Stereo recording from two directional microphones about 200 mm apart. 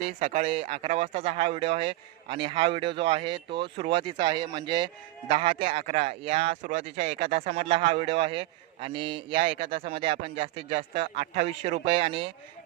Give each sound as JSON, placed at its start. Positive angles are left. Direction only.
{"t": 0.2, "sound": "speech", "side_deg": -30}